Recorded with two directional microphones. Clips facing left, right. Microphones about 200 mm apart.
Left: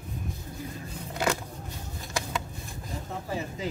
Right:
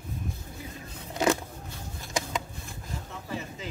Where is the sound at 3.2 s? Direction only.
40° left (ahead or behind).